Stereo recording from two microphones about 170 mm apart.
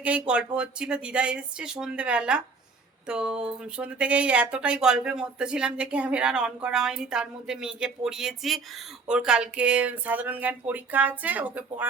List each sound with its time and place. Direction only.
0.0 s speech: 5° right (ahead or behind)